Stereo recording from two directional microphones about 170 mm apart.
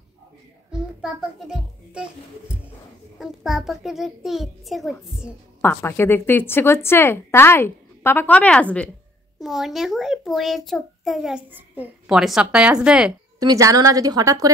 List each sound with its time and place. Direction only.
0.7 s music: 5° right (ahead or behind)
3.2 s a child's voice: centre (ahead or behind)
5.6 s a woman's voice: 15° left (ahead or behind); by 13.1 s 5° right (ahead or behind)
13.4 s a woman's voice: 20° right (ahead or behind)